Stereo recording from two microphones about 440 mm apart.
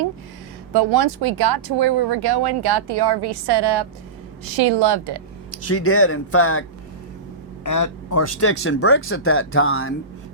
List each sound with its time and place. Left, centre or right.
0.7 s speech: right
5.5 s speech: left
7.6 s speech: left